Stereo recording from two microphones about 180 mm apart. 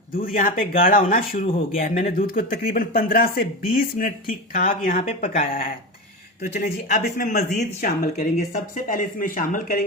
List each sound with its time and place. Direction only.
0.3 s speech: 50° left (ahead or behind)